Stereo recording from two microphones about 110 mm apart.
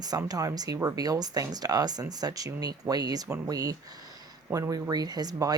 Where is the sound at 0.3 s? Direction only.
35° right (ahead or behind).